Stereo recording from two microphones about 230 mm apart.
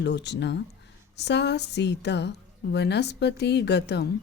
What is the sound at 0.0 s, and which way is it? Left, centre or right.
A woman's voice, left.